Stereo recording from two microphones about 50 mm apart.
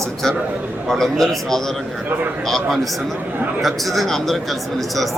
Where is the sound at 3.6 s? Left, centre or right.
Centre.